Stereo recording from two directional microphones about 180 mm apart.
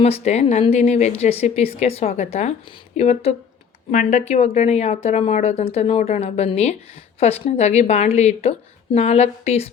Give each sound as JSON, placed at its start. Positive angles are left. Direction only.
{"t": 0.0, "sound": "speech", "side_deg": 35}